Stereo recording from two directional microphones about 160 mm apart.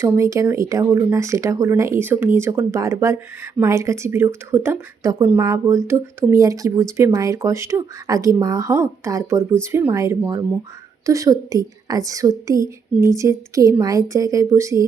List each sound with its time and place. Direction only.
0.0 s speech: 20° right (ahead or behind)